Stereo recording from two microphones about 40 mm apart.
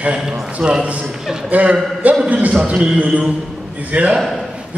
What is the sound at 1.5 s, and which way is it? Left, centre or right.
Speech, right.